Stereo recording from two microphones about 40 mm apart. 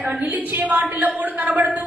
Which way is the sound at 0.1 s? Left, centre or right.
Right.